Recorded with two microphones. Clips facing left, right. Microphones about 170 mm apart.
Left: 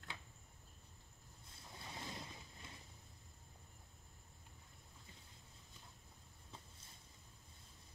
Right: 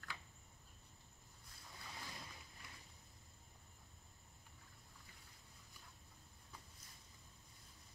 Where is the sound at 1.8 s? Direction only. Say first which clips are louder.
Left 4 dB; 25° left (ahead or behind).